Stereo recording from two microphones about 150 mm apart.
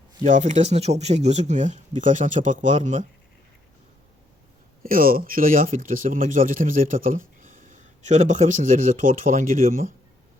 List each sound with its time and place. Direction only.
0.3 s speech: 55° right (ahead or behind)
4.8 s speech: 70° right (ahead or behind)